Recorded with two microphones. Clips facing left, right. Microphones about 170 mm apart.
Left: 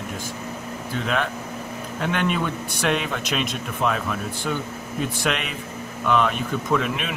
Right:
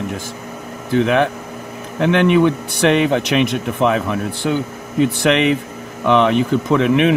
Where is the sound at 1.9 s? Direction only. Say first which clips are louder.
Right 11 dB; 70° right (ahead or behind).